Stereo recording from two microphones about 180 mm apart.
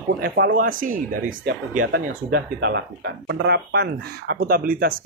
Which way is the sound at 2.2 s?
60° right (ahead or behind).